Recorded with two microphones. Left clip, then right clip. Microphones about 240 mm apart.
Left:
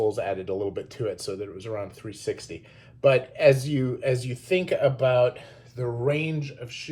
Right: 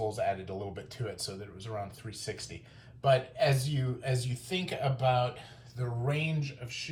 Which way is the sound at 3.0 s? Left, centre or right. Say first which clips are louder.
Left 8 dB; left.